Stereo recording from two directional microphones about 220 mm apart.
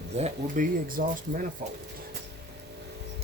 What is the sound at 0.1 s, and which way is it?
Speech, 30° right (ahead or behind).